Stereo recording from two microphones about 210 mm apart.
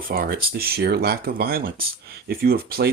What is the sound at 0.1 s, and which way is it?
Speech, 45° right (ahead or behind).